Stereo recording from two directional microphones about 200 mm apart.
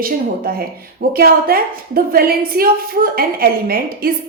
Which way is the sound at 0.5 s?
50° right (ahead or behind).